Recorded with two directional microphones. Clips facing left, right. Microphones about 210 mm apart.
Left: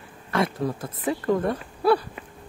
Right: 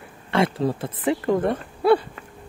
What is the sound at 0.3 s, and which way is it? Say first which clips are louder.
Speech: right 3 dB; 30° right (ahead or behind).